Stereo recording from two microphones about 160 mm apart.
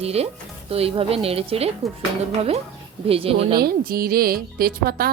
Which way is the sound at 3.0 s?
35° right (ahead or behind).